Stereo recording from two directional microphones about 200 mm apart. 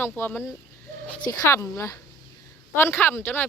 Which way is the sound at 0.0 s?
10° left (ahead or behind).